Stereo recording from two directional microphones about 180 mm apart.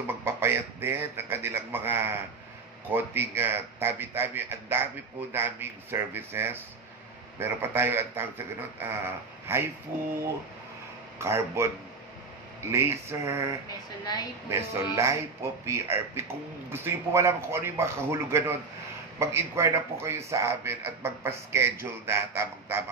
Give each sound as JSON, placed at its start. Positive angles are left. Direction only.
{"t": 0.0, "sound": "a man's voice", "side_deg": -15}
{"t": 11.1, "sound": "a man's voice", "side_deg": -15}
{"t": 12.7, "sound": "a man's voice", "side_deg": -15}
{"t": 13.7, "sound": "a woman's voice", "side_deg": 20}
{"t": 14.5, "sound": "a man's voice", "side_deg": -15}